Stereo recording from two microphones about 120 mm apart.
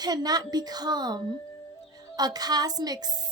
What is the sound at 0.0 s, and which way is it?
A woman's voice, 35° right (ahead or behind).